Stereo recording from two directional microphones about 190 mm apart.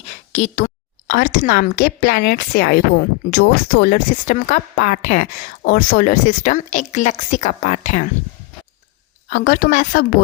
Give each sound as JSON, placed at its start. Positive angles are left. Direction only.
{"t": 0.0, "sound": "a sound", "side_deg": 40}
{"t": 1.2, "sound": "a woman's voice", "side_deg": 55}
{"t": 9.3, "sound": "a woman's voice", "side_deg": 50}